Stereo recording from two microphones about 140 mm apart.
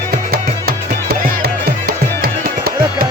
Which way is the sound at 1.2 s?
85° right.